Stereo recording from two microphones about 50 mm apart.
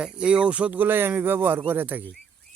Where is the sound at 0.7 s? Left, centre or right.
Right.